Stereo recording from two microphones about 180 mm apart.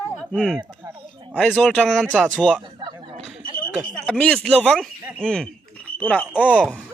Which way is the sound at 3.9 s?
5° left (ahead or behind).